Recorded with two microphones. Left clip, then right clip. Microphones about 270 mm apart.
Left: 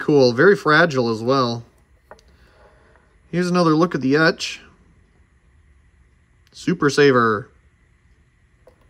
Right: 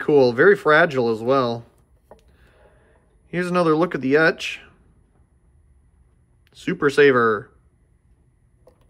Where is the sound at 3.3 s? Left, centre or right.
Centre.